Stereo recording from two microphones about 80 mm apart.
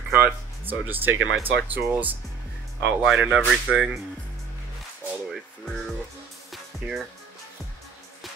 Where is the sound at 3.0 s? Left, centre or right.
Centre.